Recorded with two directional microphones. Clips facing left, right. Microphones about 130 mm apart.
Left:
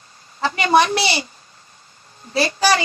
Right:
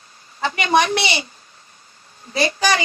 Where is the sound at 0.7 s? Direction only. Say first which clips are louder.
Left 2 dB; 35° left (ahead or behind).